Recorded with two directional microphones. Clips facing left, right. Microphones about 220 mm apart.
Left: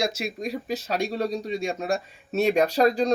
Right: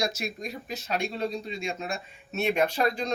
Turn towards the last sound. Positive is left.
turn(degrees=40)  # may be behind; listen again after turning